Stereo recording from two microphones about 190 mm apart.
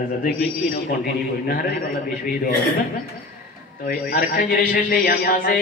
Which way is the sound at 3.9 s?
50° left (ahead or behind).